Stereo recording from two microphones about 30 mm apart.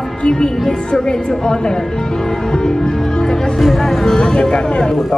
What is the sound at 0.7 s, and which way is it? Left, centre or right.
Speech, left.